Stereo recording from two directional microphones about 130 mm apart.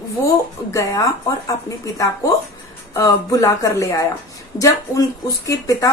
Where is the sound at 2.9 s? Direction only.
25° left (ahead or behind).